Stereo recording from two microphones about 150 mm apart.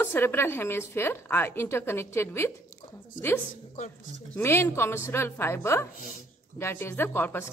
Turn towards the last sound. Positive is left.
turn(degrees=15)  # may be behind; listen again after turning